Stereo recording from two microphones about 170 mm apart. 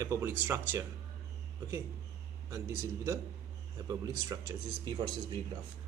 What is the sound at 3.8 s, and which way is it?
A man's voice, 20° right (ahead or behind).